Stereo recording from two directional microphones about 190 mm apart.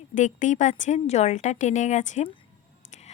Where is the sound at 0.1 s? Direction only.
40° left (ahead or behind).